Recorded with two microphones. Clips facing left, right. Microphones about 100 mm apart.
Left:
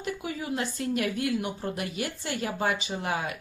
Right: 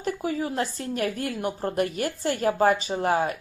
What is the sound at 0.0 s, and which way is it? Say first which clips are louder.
A woman's voice: right 6 dB; 40° right (ahead or behind).